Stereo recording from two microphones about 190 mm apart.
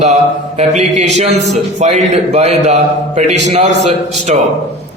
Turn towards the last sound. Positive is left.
turn(degrees=-35)  # may be behind; listen again after turning